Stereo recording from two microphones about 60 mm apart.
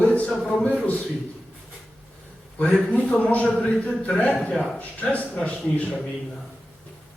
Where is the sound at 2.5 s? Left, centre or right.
Centre.